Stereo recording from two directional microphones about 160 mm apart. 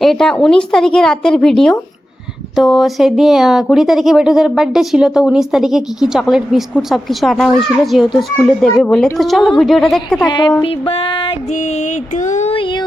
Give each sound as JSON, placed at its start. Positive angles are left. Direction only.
{"t": 0.0, "sound": "speech", "side_deg": 0}
{"t": 10.2, "sound": "speech", "side_deg": 30}
{"t": 10.6, "sound": "music", "side_deg": 35}
{"t": 11.5, "sound": "a sound", "side_deg": 50}
{"t": 12.5, "sound": "child singing", "side_deg": 30}